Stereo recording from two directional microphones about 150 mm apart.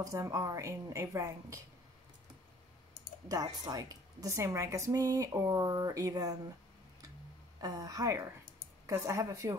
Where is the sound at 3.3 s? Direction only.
25° right (ahead or behind).